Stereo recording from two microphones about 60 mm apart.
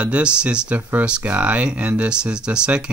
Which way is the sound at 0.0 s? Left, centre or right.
Centre.